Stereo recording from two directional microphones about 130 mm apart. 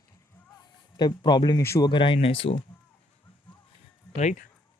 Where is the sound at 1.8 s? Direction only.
40° left (ahead or behind).